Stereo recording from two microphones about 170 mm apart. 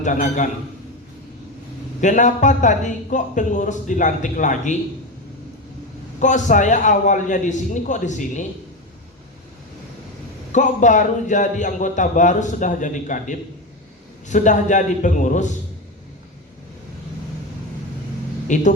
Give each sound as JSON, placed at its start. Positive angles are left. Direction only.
{"t": 0.0, "sound": "a man's voice", "side_deg": 50}
{"t": 2.0, "sound": "a man's voice", "side_deg": 45}
{"t": 6.1, "sound": "a man's voice", "side_deg": 45}
{"t": 10.5, "sound": "a man's voice", "side_deg": 45}
{"t": 18.4, "sound": "speech", "side_deg": 45}